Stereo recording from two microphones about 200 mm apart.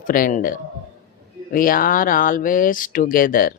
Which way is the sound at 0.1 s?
40° left (ahead or behind).